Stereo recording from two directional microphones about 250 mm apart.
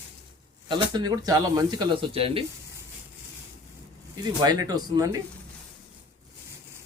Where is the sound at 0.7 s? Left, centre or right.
Centre.